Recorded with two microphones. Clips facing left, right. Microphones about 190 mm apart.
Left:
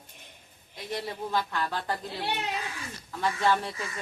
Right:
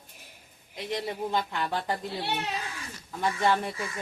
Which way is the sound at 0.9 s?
15° right (ahead or behind).